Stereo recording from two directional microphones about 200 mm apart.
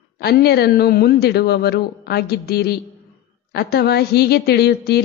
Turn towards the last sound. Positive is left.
turn(degrees=55)  # may be behind; listen again after turning